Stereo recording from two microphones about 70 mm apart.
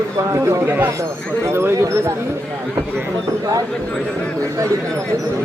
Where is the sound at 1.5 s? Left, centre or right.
Right.